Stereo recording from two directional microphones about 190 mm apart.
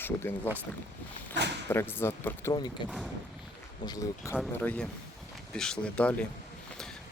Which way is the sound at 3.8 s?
20° left (ahead or behind).